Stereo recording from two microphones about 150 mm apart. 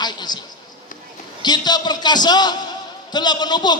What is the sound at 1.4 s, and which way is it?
A man's voice, 30° left (ahead or behind).